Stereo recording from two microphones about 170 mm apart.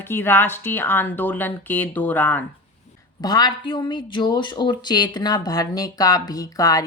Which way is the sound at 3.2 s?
25° left (ahead or behind).